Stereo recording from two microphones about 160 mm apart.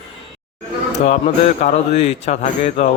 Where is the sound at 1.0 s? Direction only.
45° left (ahead or behind).